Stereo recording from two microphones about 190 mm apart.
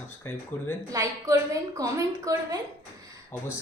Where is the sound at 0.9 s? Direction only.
15° right (ahead or behind).